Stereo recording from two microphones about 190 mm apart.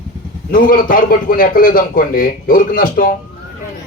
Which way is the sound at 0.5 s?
45° left (ahead or behind).